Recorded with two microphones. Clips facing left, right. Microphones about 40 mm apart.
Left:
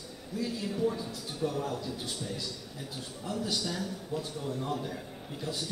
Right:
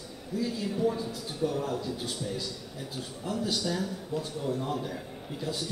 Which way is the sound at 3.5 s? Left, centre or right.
Centre.